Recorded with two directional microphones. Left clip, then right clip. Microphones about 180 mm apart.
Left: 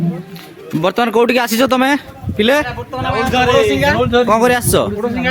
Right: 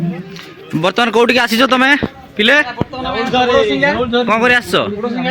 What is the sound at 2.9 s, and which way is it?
A man's voice, centre (ahead or behind).